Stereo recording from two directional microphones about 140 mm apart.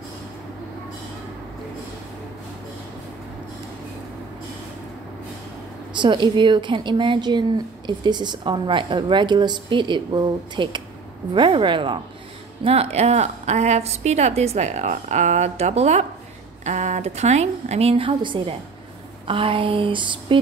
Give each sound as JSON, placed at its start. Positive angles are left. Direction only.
{"t": 5.9, "sound": "a woman's voice", "side_deg": -35}
{"t": 12.6, "sound": "a woman's voice", "side_deg": -45}